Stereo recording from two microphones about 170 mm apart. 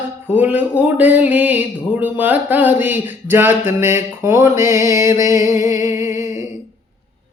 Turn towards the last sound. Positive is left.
turn(degrees=-15)  # may be behind; listen again after turning